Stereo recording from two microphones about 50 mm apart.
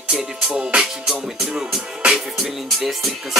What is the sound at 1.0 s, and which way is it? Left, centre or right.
Speech, centre.